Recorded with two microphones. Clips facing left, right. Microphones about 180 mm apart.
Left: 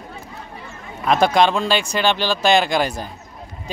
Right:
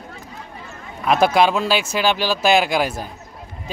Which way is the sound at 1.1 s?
5° right (ahead or behind).